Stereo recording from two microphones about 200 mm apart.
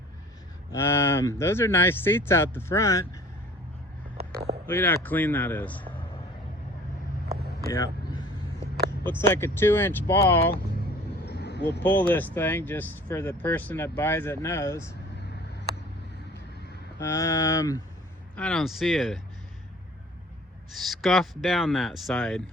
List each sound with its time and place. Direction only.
0.7 s speech: 10° left (ahead or behind)
4.6 s speech: 10° left (ahead or behind)
7.7 s vehicle: 20° left (ahead or behind)
9.0 s speech: 10° left (ahead or behind)
11.3 s vehicle: 55° left (ahead or behind)
11.8 s speech: 10° left (ahead or behind)
17.0 s speech: 15° left (ahead or behind)
18.3 s speech: 5° left (ahead or behind)
20.7 s speech: centre (ahead or behind)